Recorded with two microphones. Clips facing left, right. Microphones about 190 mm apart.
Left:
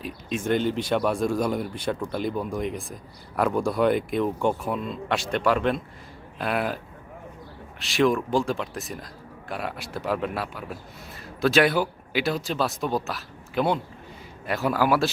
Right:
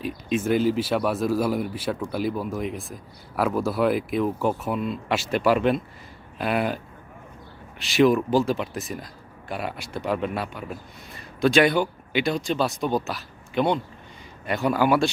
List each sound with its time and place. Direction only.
0.0 s speech: centre (ahead or behind)
7.8 s speech: centre (ahead or behind)